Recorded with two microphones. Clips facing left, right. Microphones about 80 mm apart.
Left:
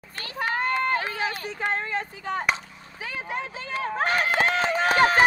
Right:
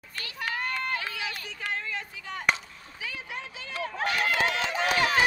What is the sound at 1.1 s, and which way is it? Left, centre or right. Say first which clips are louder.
Speech: left 7 dB; left.